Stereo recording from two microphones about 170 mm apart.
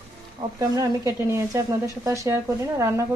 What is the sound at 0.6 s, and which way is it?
A woman's voice, 20° right (ahead or behind).